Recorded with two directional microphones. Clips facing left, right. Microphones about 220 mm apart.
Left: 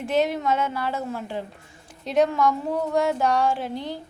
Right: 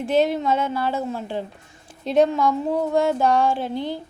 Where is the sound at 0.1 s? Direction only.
30° right (ahead or behind).